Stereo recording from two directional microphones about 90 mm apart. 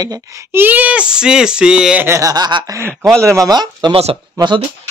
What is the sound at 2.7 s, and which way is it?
Speech, 30° right (ahead or behind).